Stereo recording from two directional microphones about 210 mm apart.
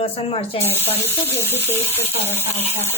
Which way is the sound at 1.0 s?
10° left (ahead or behind).